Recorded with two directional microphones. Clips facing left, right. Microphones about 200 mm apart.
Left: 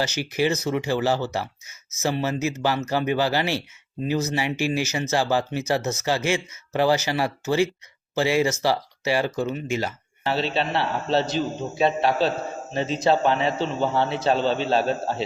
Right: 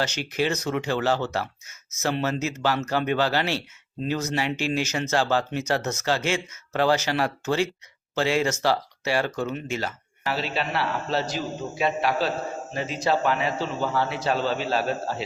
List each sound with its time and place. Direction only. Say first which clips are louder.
0.0 s speech: left 2 dB; 10° left (ahead or behind)
10.2 s a man's voice: left 3 dB; 25° left (ahead or behind)